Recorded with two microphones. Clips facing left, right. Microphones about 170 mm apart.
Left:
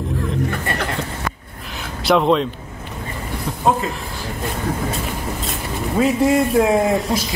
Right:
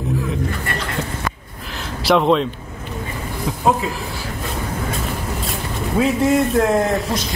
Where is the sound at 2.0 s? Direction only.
Centre (ahead or behind).